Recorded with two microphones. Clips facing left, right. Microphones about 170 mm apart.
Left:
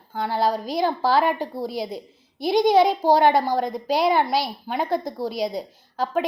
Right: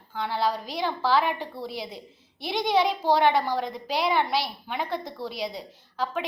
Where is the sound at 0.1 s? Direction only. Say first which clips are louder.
Left 4 dB; 45° left (ahead or behind).